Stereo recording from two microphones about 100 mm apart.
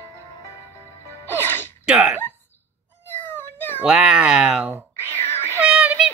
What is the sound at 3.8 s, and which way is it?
Speech, 10° right (ahead or behind).